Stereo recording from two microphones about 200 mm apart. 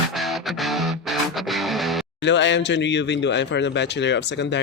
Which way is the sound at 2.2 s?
65° left (ahead or behind).